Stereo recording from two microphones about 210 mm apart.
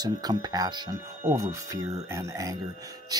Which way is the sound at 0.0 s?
20° right (ahead or behind).